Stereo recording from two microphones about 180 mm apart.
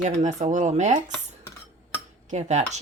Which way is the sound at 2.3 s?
40° right (ahead or behind).